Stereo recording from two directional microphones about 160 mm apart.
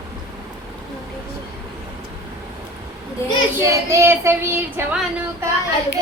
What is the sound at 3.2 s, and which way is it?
Speech, 15° left (ahead or behind).